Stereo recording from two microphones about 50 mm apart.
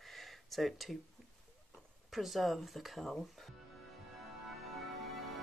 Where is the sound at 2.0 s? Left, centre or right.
Centre.